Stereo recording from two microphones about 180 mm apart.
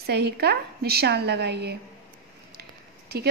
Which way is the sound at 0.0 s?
65° right (ahead or behind).